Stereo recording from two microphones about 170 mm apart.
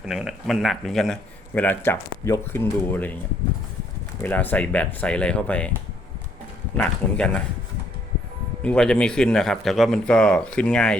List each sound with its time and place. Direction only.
0.0 s a man's voice: centre (ahead or behind)
4.2 s speech: 10° left (ahead or behind)
6.7 s speech: 5° left (ahead or behind)
8.6 s a man's voice: 5° left (ahead or behind)